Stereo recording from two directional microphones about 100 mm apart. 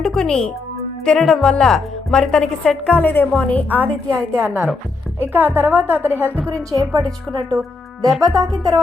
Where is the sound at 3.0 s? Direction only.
15° left (ahead or behind).